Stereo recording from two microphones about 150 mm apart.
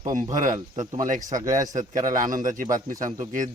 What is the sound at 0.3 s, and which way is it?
Speech, 60° right (ahead or behind).